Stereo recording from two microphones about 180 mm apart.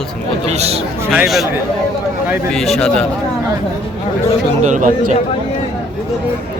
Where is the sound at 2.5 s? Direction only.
Centre (ahead or behind).